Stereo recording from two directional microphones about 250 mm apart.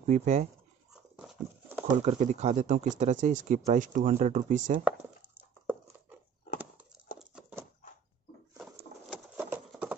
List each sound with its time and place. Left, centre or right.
0.0 s speech: right
1.1 s horse: centre
1.9 s speech: right
7.2 s a sound: centre
9.1 s horse: centre